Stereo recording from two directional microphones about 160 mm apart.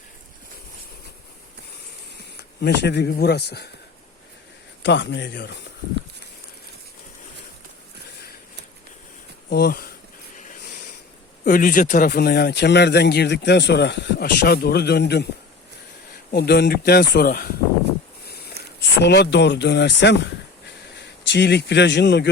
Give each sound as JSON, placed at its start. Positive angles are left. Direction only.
{"t": 2.6, "sound": "a man's voice", "side_deg": 90}
{"t": 4.8, "sound": "a man's voice", "side_deg": 90}
{"t": 9.5, "sound": "speech", "side_deg": 85}
{"t": 10.3, "sound": "a sound", "side_deg": 50}
{"t": 11.4, "sound": "a man's voice", "side_deg": 55}
{"t": 16.3, "sound": "speech", "side_deg": 90}
{"t": 18.3, "sound": "a sound", "side_deg": 85}
{"t": 18.8, "sound": "a man's voice", "side_deg": 90}